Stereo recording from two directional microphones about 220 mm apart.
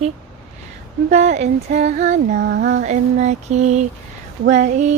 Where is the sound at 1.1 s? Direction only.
30° right (ahead or behind).